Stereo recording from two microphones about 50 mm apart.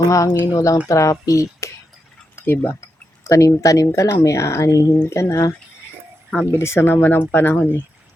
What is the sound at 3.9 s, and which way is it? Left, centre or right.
Speech, left.